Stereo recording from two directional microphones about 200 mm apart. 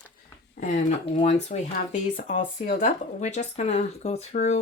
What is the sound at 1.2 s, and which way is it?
Speech, 35° left (ahead or behind).